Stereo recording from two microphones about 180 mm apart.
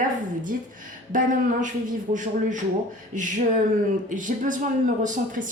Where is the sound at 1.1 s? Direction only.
45° right (ahead or behind).